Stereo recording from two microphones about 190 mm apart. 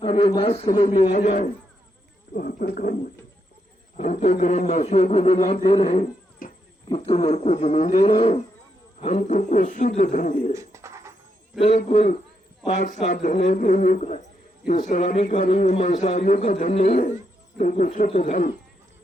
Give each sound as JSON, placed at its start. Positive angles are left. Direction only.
{"t": 0.0, "sound": "a man's voice", "side_deg": 30}
{"t": 2.3, "sound": "a woman's voice", "side_deg": 45}
{"t": 3.9, "sound": "a man's voice", "side_deg": 40}
{"t": 10.5, "sound": "bird", "side_deg": -15}
{"t": 11.9, "sound": "a man's voice", "side_deg": 35}